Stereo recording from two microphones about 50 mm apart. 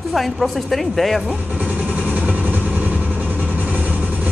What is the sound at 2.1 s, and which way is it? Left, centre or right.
Vehicle, right.